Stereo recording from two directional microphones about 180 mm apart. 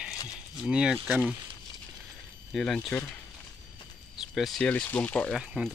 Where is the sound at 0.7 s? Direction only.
5° right (ahead or behind).